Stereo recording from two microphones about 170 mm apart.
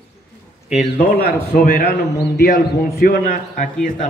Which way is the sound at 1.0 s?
60° left (ahead or behind).